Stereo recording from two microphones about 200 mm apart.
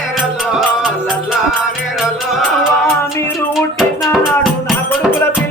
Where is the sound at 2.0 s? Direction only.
Centre (ahead or behind).